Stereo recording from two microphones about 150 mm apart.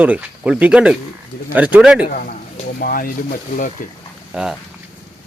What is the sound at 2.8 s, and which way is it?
Speech, 70° left (ahead or behind).